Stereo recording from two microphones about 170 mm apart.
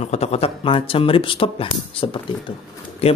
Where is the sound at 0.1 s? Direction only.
40° left (ahead or behind).